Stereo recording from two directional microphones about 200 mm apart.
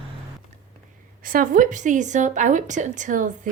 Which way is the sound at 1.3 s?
45° right (ahead or behind).